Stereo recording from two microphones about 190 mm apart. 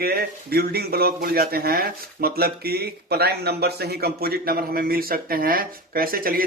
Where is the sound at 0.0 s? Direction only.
55° right (ahead or behind).